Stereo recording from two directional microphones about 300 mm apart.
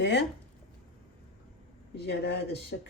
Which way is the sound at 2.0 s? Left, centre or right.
Left.